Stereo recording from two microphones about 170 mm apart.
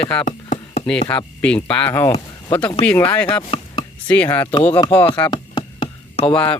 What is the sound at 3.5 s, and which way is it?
Chopping, 35° left (ahead or behind).